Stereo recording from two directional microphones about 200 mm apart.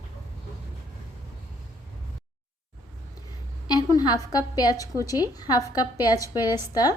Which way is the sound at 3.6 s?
20° left (ahead or behind).